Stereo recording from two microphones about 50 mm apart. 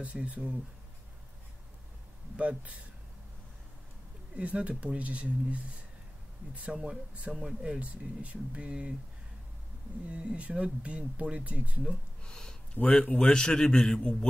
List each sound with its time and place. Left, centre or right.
0.0 s speech: right
2.3 s speech: right
4.4 s speech: right
10.0 s speech: right
12.2 s a sound: centre
12.8 s speech: left
13.3 s a man's voice: centre